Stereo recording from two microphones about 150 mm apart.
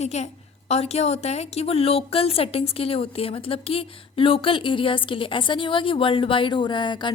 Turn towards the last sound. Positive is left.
turn(degrees=30)  # may be behind; listen again after turning